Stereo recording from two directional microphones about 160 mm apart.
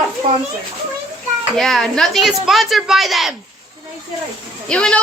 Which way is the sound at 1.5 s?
Centre (ahead or behind).